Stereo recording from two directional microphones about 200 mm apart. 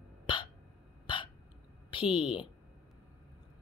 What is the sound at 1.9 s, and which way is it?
Speech, 25° left (ahead or behind).